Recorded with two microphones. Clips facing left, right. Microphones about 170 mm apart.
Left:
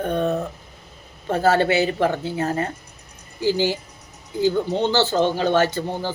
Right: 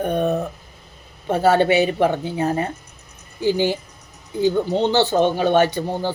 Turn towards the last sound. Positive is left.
turn(degrees=-15)  # may be behind; listen again after turning